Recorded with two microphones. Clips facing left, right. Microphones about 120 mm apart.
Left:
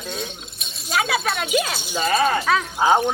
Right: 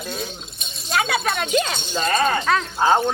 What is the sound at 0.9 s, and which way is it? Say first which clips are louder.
A man's voice: even; centre (ahead or behind).